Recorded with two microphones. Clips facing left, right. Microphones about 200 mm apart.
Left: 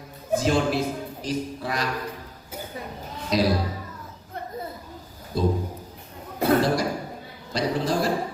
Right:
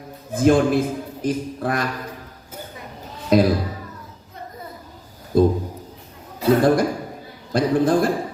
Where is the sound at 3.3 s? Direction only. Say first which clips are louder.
Right 7 dB; 55° right (ahead or behind).